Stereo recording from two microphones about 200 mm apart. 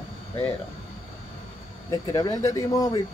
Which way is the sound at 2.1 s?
15° left (ahead or behind).